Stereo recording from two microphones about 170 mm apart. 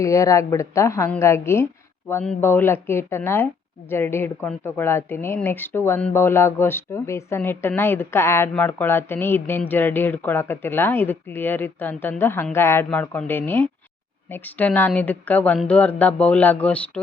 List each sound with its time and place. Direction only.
0.0 s speech: 20° left (ahead or behind)